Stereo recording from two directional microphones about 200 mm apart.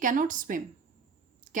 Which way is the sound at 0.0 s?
40° right (ahead or behind).